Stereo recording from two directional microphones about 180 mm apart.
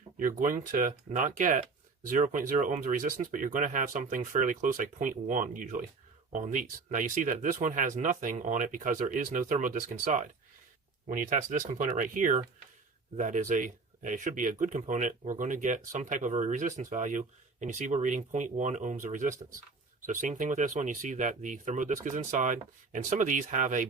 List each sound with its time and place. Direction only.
0.2 s speech: 50° right (ahead or behind)